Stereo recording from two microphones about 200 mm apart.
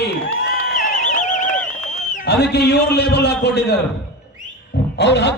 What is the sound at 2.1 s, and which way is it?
A man's voice, 55° left (ahead or behind).